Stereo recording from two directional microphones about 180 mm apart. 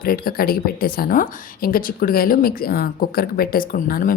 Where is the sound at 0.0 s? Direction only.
55° left (ahead or behind).